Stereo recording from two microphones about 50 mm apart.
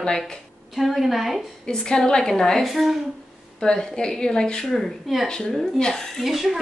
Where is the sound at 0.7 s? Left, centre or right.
Centre.